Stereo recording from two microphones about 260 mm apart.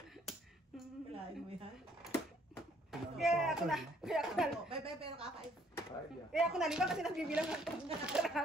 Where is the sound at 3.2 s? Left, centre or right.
Centre.